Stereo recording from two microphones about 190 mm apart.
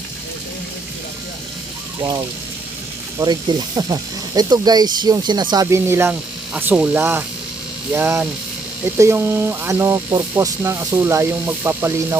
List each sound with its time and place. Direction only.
2.0 s speech: 20° right (ahead or behind)